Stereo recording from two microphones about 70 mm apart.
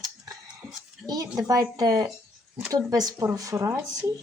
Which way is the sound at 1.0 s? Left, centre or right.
Right.